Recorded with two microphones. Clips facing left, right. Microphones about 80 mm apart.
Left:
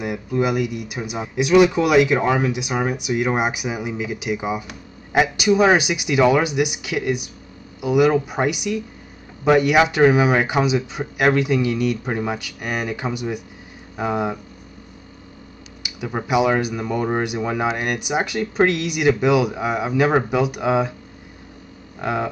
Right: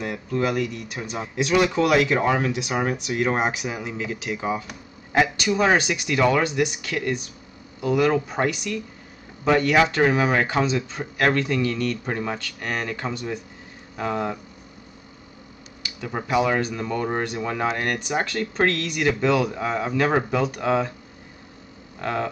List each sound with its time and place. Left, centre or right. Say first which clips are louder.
0.0 s speech: left 3 dB; centre
15.8 s speech: left 3 dB; centre
22.0 s speech: left 3 dB; centre